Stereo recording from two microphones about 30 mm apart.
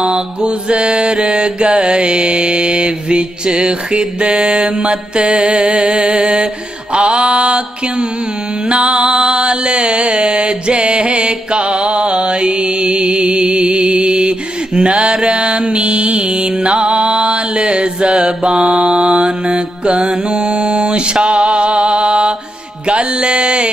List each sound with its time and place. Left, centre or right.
0.7 s mantra: right
8.6 s music: right
13.6 s mantra: right
19.2 s mantra: right
22.8 s music: right